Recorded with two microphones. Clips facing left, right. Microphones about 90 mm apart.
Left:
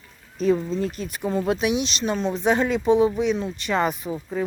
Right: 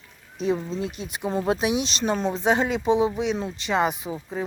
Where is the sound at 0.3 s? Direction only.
20° right (ahead or behind).